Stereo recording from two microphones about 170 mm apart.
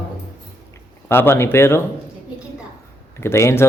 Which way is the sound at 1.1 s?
15° left (ahead or behind).